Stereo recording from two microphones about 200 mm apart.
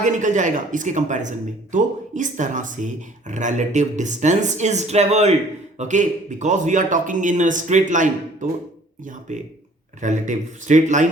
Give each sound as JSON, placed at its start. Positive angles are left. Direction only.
{"t": 0.0, "sound": "speech", "side_deg": -40}